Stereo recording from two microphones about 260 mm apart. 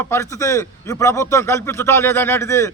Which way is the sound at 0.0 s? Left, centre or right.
Centre.